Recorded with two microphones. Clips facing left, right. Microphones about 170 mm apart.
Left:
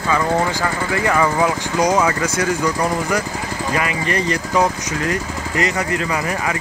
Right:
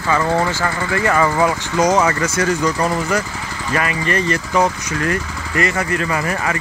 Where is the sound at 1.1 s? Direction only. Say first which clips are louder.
Right 1 dB; 10° left (ahead or behind).